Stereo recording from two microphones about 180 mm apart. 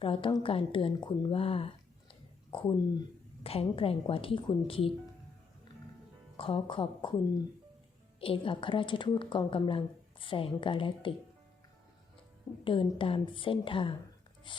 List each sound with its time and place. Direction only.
0.0 s a woman's voice: 30° left (ahead or behind)
6.3 s a woman's voice: 30° left (ahead or behind)
8.2 s a woman's voice: 30° left (ahead or behind)
12.6 s a woman's voice: 30° left (ahead or behind)